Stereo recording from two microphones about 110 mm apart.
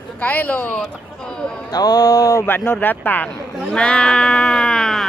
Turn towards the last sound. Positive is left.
turn(degrees=0)  # may be behind; listen again after turning